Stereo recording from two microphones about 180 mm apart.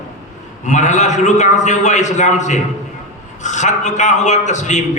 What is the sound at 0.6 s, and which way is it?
A man's voice, 40° left (ahead or behind).